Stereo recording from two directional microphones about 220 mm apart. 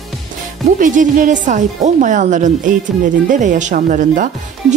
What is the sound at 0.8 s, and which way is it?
Speech, 35° right (ahead or behind).